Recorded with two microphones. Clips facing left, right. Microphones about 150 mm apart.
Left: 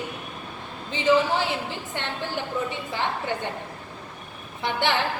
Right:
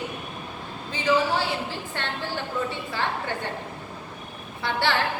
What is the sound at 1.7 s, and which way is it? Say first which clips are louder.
A man's voice: even; 20° left (ahead or behind).